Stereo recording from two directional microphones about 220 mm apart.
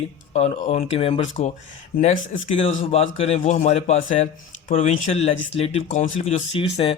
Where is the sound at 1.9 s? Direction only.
40° left (ahead or behind).